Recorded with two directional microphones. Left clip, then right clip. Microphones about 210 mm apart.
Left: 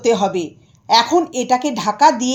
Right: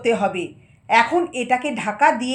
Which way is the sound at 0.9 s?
60° left (ahead or behind).